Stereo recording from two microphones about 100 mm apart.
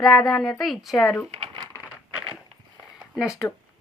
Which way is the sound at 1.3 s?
65° right (ahead or behind).